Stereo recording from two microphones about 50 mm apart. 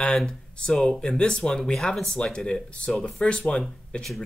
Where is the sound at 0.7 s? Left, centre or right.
Centre.